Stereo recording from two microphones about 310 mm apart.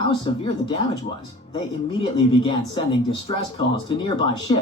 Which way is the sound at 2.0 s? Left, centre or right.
Centre.